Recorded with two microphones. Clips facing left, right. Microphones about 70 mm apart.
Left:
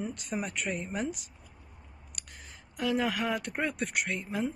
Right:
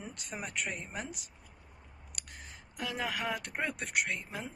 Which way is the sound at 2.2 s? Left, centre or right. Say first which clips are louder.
Even; right.